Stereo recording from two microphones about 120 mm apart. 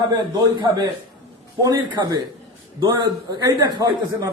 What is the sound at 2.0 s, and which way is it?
A man's voice, 35° right (ahead or behind).